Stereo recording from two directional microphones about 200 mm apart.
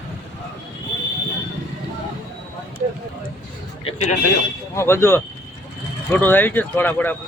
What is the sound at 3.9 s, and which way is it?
Speech, 35° left (ahead or behind).